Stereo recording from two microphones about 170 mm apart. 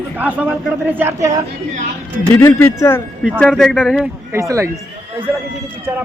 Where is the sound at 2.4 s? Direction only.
15° left (ahead or behind).